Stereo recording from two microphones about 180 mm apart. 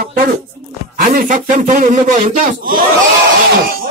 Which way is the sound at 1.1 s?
50° right (ahead or behind).